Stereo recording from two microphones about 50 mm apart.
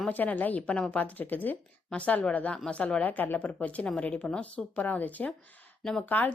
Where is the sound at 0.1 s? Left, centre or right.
Left.